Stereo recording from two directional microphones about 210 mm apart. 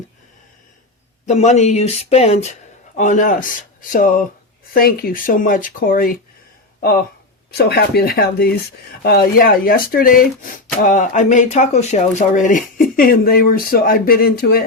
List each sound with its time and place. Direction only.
1.3 s speech: 35° left (ahead or behind)
7.5 s speech: 50° left (ahead or behind)